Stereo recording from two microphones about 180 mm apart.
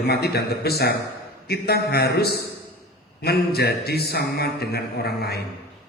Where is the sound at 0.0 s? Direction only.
60° left (ahead or behind).